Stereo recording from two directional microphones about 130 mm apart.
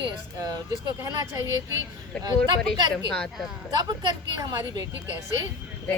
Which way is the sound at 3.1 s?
5° left (ahead or behind).